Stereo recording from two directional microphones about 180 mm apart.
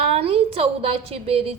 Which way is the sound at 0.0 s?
35° right (ahead or behind).